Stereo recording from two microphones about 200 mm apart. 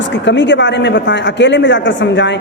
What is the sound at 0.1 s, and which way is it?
A woman's voice, 60° left (ahead or behind).